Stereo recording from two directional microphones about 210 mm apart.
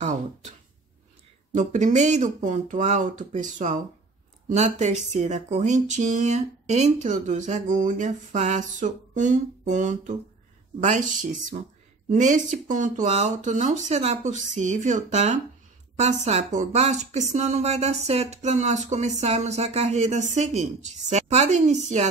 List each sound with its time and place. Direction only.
1.5 s speech: 35° right (ahead or behind)